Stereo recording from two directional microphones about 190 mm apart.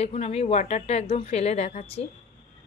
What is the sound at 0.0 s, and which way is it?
Speech, 35° left (ahead or behind).